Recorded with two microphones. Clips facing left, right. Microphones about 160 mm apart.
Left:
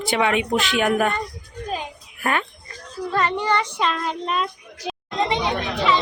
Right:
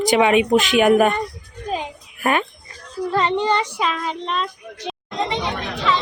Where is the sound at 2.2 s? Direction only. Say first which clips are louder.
Right 4 dB; 20° right (ahead or behind).